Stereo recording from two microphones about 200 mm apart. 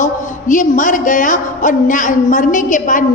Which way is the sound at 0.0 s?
40° left (ahead or behind).